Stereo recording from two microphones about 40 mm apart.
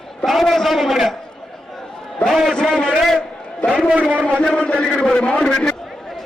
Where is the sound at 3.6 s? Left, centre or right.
Centre.